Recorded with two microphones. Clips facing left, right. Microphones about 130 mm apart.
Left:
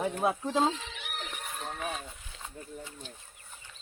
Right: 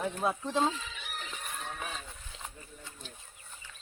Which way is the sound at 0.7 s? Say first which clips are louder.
Left 2 dB; 70° left (ahead or behind).